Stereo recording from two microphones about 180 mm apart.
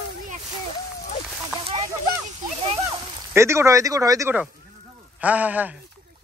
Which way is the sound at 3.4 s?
15° right (ahead or behind).